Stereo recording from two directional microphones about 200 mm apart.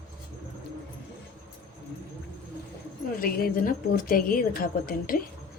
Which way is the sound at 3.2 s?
45° left (ahead or behind).